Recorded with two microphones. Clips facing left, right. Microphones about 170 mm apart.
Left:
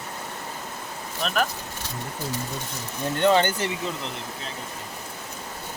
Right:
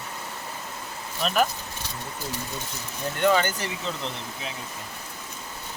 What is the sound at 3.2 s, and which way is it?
Speech, 25° left (ahead or behind).